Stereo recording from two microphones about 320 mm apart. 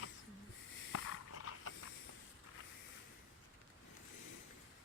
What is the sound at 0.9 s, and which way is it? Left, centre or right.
Mechanisms, left.